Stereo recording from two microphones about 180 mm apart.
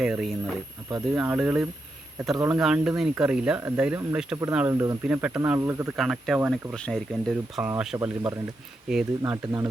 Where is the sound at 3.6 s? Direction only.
15° right (ahead or behind).